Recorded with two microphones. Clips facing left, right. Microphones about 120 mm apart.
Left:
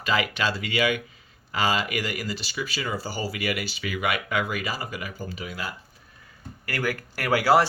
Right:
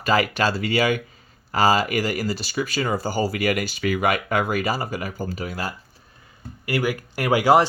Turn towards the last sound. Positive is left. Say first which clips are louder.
# right 3 dB
turn(degrees=-20)  # may be behind; listen again after turning